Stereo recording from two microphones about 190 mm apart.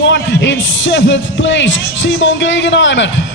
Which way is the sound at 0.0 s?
70° left (ahead or behind).